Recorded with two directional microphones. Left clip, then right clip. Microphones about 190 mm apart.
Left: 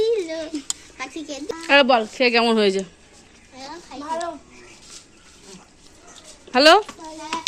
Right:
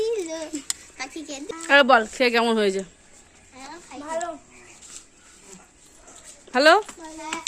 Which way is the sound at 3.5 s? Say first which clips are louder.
Left 4 dB; 5° right (ahead or behind).